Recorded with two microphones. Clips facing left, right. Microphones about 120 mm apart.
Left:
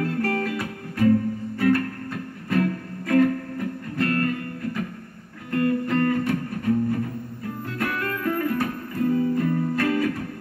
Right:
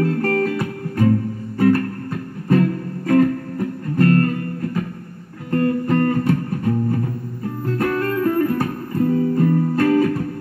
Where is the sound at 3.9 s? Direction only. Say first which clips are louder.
Right 7 dB; 40° right (ahead or behind).